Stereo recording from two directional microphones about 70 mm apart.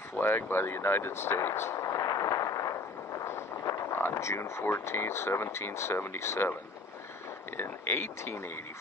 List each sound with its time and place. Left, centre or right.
0.2 s speech: left
1.9 s a sound: left
3.3 s speech: left
7.5 s speech: left